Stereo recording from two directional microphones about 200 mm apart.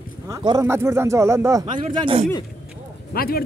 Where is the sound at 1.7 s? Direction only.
30° right (ahead or behind).